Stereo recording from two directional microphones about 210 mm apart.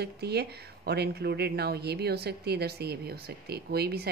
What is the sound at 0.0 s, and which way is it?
A woman's voice, 50° right (ahead or behind).